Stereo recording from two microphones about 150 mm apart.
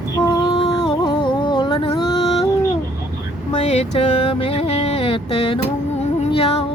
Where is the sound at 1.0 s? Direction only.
30° left (ahead or behind).